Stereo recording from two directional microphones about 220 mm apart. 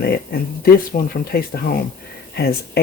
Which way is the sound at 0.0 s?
45° left (ahead or behind).